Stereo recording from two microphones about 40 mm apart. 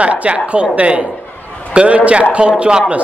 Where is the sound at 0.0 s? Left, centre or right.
Right.